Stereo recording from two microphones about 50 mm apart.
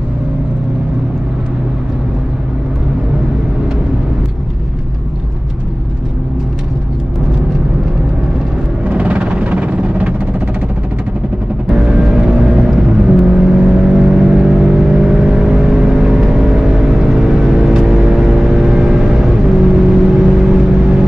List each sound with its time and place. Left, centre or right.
8.8 s music: right
11.8 s vehicle: centre